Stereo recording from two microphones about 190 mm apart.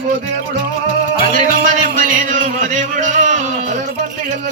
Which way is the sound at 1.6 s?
45° right (ahead or behind).